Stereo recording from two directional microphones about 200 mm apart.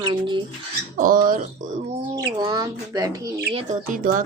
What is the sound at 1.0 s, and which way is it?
Speech, 45° right (ahead or behind).